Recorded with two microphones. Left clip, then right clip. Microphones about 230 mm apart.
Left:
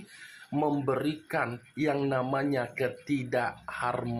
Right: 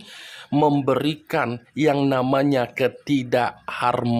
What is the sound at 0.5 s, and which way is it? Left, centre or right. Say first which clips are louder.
Speech: right 10 dB; right.